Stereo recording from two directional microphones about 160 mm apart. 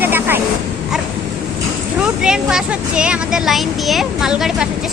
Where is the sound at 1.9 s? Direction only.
5° right (ahead or behind).